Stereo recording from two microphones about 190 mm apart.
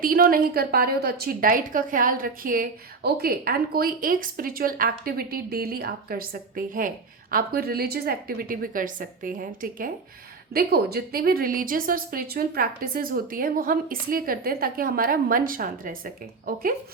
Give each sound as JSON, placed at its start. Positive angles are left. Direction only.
{"t": 0.0, "sound": "a woman's voice", "side_deg": -50}